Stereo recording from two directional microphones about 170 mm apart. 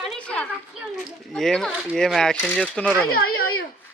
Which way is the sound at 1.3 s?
5° left (ahead or behind).